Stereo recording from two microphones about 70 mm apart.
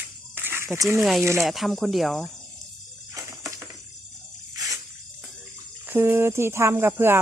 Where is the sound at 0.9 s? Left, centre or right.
Centre.